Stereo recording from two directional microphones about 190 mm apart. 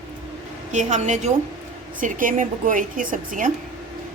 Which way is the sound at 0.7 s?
40° right (ahead or behind).